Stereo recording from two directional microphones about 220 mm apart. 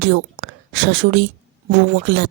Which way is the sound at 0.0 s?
50° right (ahead or behind).